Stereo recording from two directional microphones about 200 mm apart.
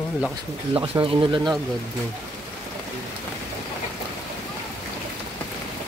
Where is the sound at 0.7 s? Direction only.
25° right (ahead or behind).